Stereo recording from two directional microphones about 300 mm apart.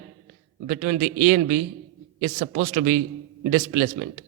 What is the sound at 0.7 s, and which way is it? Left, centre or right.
A man's voice, right.